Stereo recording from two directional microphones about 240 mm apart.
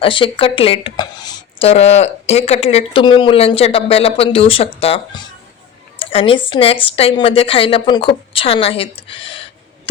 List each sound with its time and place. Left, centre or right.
0.0 s speech: left